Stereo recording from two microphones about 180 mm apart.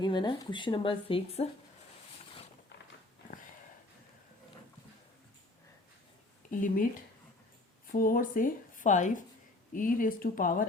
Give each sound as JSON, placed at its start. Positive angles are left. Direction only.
{"t": 0.0, "sound": "speech", "side_deg": 25}
{"t": 6.5, "sound": "speech", "side_deg": 45}
{"t": 7.9, "sound": "speech", "side_deg": 50}